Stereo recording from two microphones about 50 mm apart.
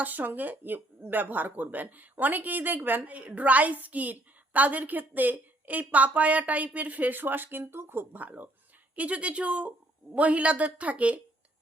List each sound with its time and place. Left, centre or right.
0.0 s a woman's voice: right
3.1 s a woman's voice: right
8.2 s a woman's voice: right